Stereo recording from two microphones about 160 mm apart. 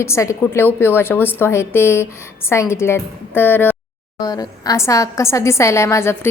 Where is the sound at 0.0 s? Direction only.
15° left (ahead or behind).